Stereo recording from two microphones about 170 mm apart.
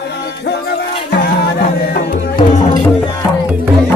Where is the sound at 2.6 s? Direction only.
25° left (ahead or behind).